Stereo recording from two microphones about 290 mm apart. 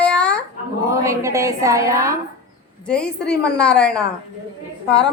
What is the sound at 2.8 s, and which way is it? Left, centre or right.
A woman's voice, centre.